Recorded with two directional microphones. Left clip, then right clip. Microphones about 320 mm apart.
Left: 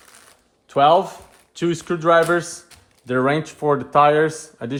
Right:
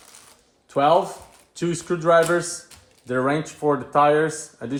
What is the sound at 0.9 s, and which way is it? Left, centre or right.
Speech, left.